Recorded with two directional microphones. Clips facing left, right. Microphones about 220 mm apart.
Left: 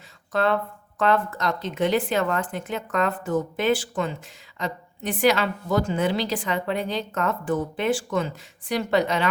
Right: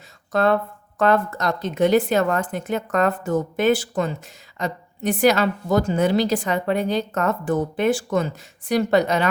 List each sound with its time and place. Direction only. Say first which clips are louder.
0.3 s a woman's voice: right 4 dB; 45° right (ahead or behind)